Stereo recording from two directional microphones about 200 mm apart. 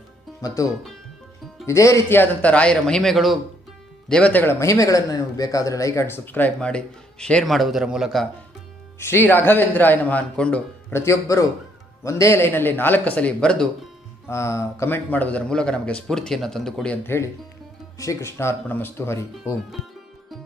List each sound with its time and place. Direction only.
0.4 s a man's voice: 15° left (ahead or behind); by 8.3 s centre (ahead or behind)
9.0 s a man's voice: 10° left (ahead or behind)